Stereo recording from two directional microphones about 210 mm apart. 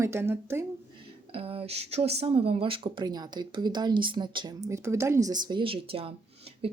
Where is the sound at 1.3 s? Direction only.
25° right (ahead or behind).